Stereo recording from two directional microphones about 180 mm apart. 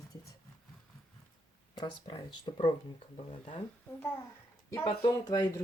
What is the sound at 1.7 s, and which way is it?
Speech, 25° left (ahead or behind).